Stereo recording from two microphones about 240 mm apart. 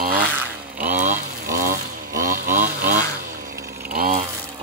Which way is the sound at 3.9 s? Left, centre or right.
Right.